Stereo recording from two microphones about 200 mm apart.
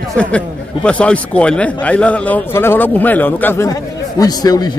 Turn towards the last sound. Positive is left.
turn(degrees=20)  # may be behind; listen again after turning